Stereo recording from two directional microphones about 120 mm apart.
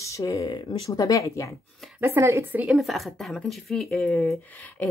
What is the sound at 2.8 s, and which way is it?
A woman's voice, centre (ahead or behind).